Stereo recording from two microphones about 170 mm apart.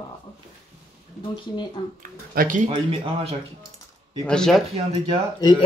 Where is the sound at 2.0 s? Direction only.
50° right (ahead or behind).